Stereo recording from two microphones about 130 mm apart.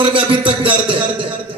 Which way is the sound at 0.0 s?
40° right (ahead or behind).